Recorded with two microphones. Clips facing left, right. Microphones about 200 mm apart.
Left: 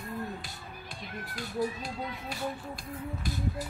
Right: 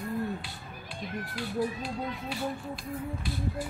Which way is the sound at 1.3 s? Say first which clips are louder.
Right 1 dB; 45° left (ahead or behind).